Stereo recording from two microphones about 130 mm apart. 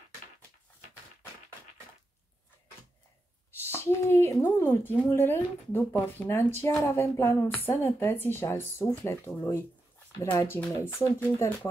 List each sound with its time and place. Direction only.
3.5 s a woman's voice: 20° left (ahead or behind)